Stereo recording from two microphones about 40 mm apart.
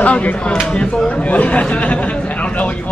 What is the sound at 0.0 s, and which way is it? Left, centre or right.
A man's voice, left.